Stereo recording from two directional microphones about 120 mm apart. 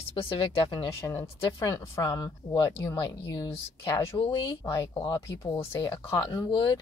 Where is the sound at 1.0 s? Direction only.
25° left (ahead or behind).